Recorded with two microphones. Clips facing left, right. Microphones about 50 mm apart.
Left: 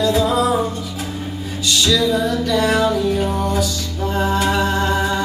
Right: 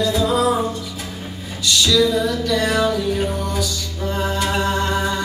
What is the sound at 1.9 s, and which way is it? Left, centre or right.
Music, left.